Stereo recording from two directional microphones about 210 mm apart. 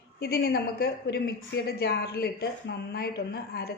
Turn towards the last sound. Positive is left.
turn(degrees=50)  # may be behind; listen again after turning